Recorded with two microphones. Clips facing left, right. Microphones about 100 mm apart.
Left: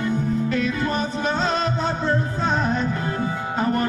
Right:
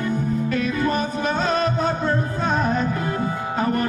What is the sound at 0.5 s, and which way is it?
Music, 25° left (ahead or behind).